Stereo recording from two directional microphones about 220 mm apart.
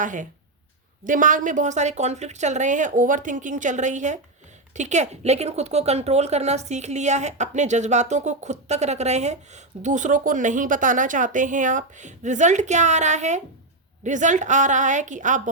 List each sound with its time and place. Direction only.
0.0 s speech: 35° right (ahead or behind)